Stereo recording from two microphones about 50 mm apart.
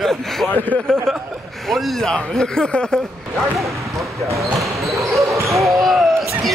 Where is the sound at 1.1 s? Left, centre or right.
Centre.